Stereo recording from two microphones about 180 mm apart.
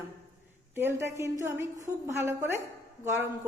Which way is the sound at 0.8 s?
15° right (ahead or behind).